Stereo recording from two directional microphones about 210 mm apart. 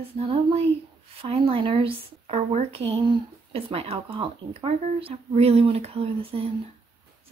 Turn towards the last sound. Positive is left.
turn(degrees=-25)  # may be behind; listen again after turning